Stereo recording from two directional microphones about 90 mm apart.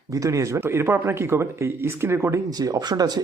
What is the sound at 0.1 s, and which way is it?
Speech, 35° right (ahead or behind).